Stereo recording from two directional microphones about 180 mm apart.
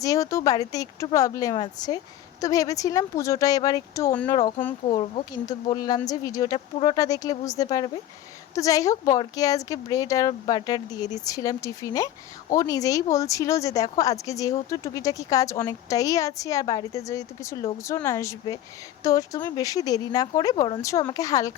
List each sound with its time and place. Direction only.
0.0 s speech: 20° left (ahead or behind)